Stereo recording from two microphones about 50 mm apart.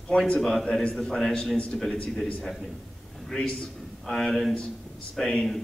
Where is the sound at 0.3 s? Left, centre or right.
Centre.